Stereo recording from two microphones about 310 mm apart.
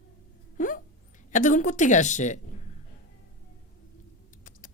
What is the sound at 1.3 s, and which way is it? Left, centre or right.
A woman's voice, left.